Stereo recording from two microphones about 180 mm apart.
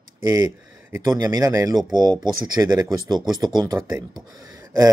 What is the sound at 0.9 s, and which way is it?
Speech, 15° right (ahead or behind).